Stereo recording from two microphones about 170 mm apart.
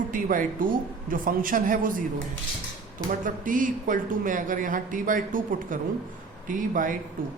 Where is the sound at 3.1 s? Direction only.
50° right (ahead or behind).